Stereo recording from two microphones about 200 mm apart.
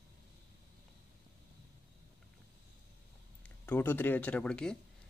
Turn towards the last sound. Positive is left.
turn(degrees=5)  # may be behind; listen again after turning